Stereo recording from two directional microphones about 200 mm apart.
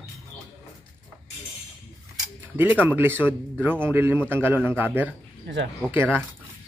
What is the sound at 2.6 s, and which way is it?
Speech, 10° right (ahead or behind).